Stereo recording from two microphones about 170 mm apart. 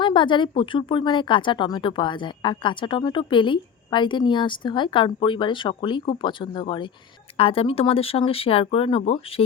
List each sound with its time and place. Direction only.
0.0 s speech: 30° left (ahead or behind)